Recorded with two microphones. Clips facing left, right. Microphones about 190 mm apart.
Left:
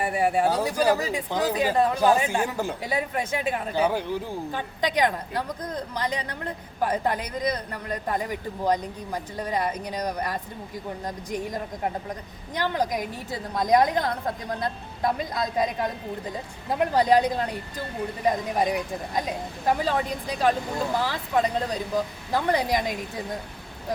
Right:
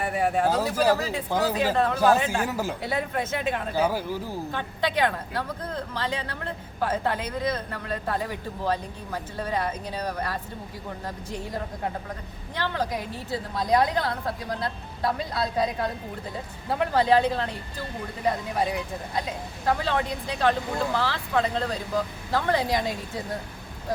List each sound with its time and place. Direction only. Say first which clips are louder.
0.0 s a woman's voice: left 1 dB; 10° left (ahead or behind)
3.8 s a man's voice: left 1 dB; 5° right (ahead or behind)
4.5 s a woman's voice: left 1 dB; 15° left (ahead or behind)